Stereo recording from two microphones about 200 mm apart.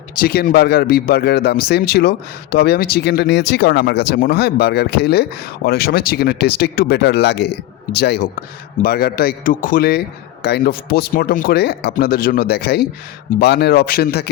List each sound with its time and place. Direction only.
0.2 s speech: 50° left (ahead or behind)